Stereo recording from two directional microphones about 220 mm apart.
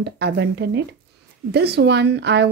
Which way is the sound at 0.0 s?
50° right (ahead or behind).